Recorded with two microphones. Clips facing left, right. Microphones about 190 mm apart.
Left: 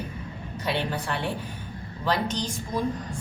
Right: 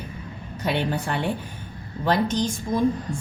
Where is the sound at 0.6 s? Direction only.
50° right (ahead or behind).